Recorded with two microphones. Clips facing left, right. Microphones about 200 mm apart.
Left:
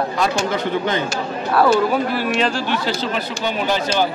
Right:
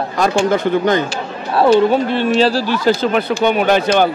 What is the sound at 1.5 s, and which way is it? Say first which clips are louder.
Speech: right 5 dB; 25° right (ahead or behind).